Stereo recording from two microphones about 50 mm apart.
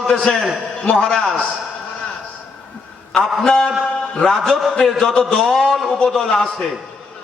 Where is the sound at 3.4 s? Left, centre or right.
Centre.